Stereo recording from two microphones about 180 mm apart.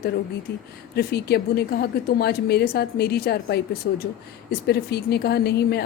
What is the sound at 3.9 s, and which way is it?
Speech, 75° left (ahead or behind).